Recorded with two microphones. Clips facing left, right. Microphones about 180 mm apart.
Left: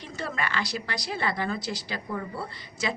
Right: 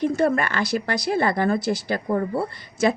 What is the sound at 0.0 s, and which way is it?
A woman's voice, 55° right (ahead or behind).